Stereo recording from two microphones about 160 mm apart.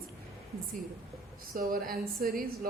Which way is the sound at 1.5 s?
65° right (ahead or behind).